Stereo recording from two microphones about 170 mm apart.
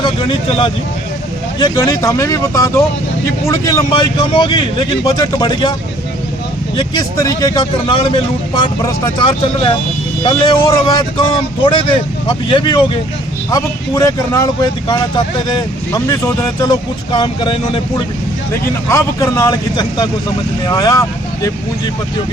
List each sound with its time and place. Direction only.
0.0 s speech: 30° left (ahead or behind)
6.7 s speech: 25° left (ahead or behind)
18.5 s speech: 15° left (ahead or behind)